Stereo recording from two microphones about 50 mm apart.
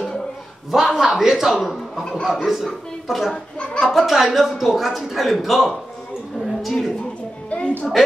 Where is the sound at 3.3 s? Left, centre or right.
Centre.